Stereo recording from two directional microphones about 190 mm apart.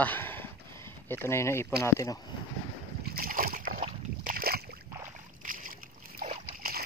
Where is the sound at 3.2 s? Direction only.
50° right (ahead or behind).